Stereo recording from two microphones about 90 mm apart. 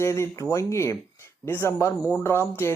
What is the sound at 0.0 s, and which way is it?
Speech, 30° left (ahead or behind).